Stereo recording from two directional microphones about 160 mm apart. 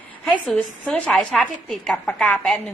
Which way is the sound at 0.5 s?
10° left (ahead or behind).